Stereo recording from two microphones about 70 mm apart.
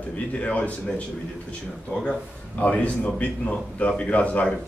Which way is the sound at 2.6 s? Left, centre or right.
Centre.